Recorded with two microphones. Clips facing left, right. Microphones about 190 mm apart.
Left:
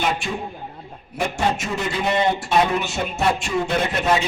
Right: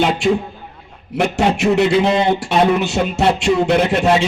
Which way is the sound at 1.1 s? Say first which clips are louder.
Right 6 dB; 75° right (ahead or behind).